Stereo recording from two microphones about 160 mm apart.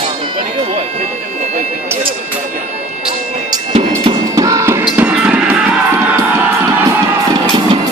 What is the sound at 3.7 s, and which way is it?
Music, 40° right (ahead or behind).